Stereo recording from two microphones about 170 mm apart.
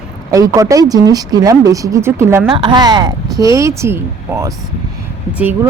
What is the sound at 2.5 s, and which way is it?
Speech, 25° right (ahead or behind).